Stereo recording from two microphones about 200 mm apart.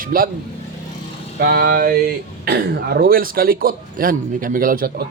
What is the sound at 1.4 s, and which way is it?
Speech, 50° right (ahead or behind).